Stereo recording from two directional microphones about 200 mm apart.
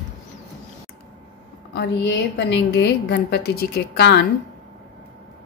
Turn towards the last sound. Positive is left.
turn(degrees=55)  # may be behind; listen again after turning